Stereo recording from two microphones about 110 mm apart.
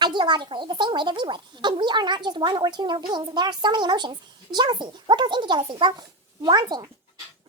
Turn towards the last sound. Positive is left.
turn(degrees=-40)  # may be behind; listen again after turning